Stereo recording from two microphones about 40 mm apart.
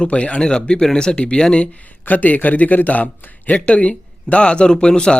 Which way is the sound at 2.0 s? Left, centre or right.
Left.